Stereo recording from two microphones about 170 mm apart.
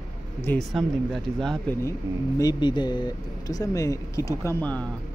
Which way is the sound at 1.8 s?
20° left (ahead or behind).